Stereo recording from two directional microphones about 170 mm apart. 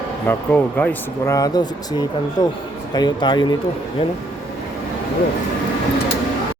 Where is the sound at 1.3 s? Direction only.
25° left (ahead or behind).